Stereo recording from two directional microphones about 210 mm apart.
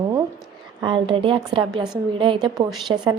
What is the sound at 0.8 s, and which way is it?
A woman's voice, 25° right (ahead or behind).